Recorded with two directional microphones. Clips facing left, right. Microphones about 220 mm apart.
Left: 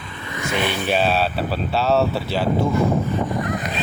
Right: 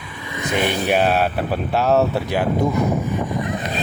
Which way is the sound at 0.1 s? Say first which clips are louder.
Right 2 dB; 15° right (ahead or behind).